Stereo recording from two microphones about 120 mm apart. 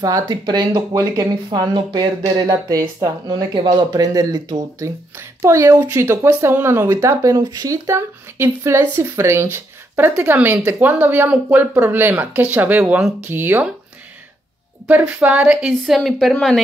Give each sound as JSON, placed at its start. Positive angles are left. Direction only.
{"t": 0.0, "sound": "a woman's voice", "side_deg": -30}
{"t": 14.9, "sound": "a woman's voice", "side_deg": -15}